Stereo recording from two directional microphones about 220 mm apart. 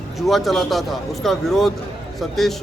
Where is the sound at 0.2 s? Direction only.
Centre (ahead or behind).